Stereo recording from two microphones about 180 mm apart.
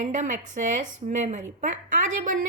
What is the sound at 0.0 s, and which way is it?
A woman's voice, 40° right (ahead or behind).